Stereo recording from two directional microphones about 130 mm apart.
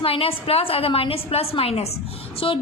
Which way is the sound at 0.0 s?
45° left (ahead or behind).